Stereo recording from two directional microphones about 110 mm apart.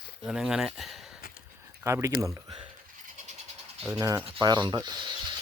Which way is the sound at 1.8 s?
25° right (ahead or behind).